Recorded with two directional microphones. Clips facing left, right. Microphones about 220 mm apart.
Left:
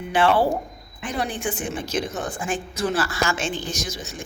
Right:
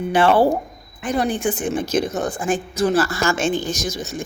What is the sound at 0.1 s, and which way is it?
A woman's voice, 45° right (ahead or behind).